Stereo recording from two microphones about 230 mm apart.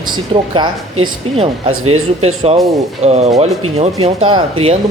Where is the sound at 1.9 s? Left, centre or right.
Right.